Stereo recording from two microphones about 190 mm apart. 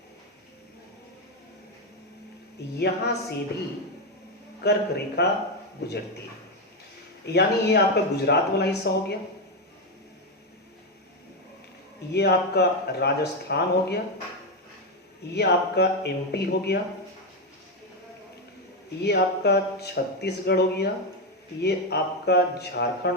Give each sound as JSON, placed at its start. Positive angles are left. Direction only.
{"t": 2.7, "sound": "speech", "side_deg": 60}
{"t": 4.6, "sound": "speech", "side_deg": 60}
{"t": 7.3, "sound": "speech", "side_deg": 60}
{"t": 12.1, "sound": "speech", "side_deg": 60}
{"t": 15.3, "sound": "speech", "side_deg": 60}
{"t": 19.0, "sound": "speech", "side_deg": 60}